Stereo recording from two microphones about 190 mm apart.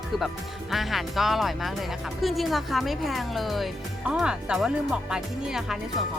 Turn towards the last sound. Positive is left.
turn(degrees=0)  # may be behind; listen again after turning